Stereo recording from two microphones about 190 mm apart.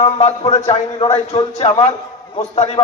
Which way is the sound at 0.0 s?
30° left (ahead or behind).